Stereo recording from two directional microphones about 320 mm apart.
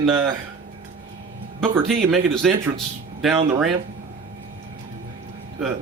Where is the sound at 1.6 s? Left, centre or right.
Centre.